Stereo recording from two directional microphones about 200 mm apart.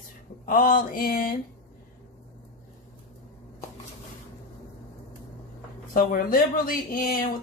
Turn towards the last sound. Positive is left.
turn(degrees=45)  # may be behind; listen again after turning